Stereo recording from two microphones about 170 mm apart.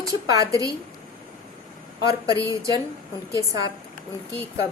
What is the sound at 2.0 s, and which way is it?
Speech, 20° right (ahead or behind).